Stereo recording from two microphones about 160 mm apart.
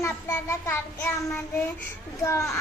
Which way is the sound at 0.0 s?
15° left (ahead or behind).